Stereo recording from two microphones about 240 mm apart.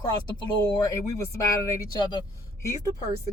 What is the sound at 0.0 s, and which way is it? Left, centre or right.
Speech, centre.